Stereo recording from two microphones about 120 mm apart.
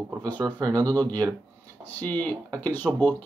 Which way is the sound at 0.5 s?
30° right (ahead or behind).